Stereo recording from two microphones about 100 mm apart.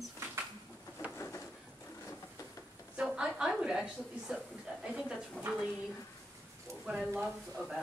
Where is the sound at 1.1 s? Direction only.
30° left (ahead or behind).